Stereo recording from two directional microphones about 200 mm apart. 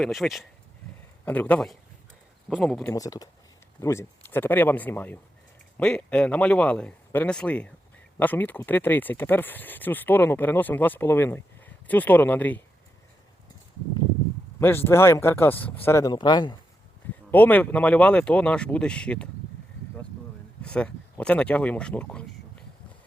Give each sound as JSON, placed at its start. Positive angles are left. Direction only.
{"t": 0.0, "sound": "speech", "side_deg": 0}
{"t": 2.9, "sound": "speech", "side_deg": 15}
{"t": 14.6, "sound": "speech", "side_deg": 10}
{"t": 17.3, "sound": "speech", "side_deg": 10}
{"t": 20.6, "sound": "speech", "side_deg": 5}